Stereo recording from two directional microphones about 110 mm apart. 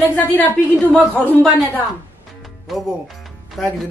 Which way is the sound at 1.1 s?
15° left (ahead or behind).